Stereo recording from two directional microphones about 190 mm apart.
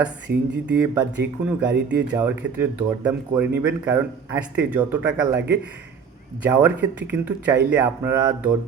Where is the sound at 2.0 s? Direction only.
10° right (ahead or behind).